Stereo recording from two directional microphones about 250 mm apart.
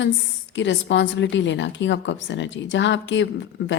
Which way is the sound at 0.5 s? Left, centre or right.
Left.